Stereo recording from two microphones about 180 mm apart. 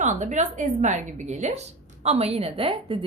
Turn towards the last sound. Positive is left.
turn(degrees=-30)  # may be behind; listen again after turning